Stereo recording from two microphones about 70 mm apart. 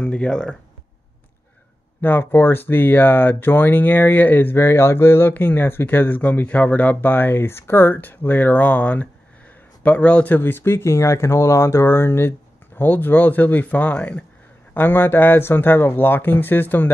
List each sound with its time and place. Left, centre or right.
0.0 s speech: centre
2.0 s speech: left